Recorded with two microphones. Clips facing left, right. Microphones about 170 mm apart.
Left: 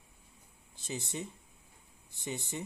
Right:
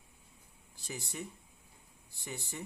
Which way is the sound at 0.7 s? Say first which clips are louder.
Left 3 dB; 20° left (ahead or behind).